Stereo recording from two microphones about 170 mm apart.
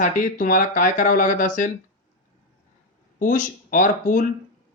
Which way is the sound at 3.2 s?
50° left (ahead or behind).